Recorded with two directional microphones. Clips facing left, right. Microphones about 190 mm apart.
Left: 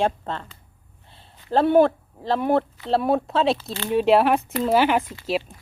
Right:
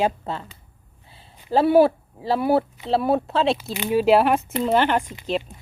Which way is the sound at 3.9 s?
Centre (ahead or behind).